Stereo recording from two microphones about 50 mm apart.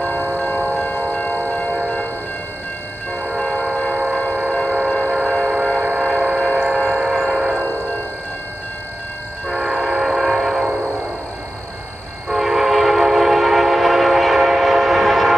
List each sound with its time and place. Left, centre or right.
0.7 s a sound: left
1.1 s train: left
3.2 s train: centre
9.5 s train: centre
12.3 s train: centre